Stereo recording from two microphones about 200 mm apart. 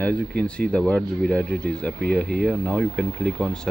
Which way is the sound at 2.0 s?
50° right (ahead or behind).